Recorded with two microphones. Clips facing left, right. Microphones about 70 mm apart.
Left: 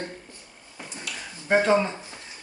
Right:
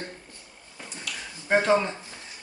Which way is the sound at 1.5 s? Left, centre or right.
Centre.